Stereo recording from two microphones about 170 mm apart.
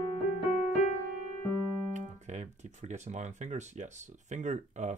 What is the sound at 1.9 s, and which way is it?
Speech, 45° right (ahead or behind).